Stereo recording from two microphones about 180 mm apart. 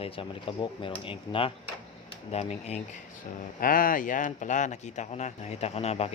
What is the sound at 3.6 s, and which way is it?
Speech, 50° left (ahead or behind).